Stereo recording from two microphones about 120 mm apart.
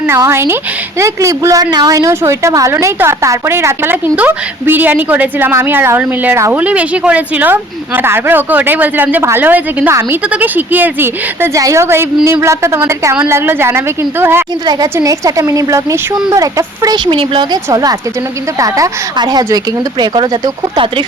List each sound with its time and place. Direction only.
0.1 s a woman's voice: 20° right (ahead or behind)
17.1 s speech: 45° right (ahead or behind)
17.7 s a woman's voice: 30° right (ahead or behind)